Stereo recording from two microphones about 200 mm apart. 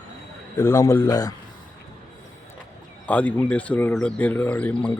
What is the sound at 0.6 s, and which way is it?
Speech, 15° left (ahead or behind).